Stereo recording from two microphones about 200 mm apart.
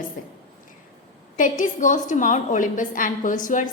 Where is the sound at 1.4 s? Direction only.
40° left (ahead or behind).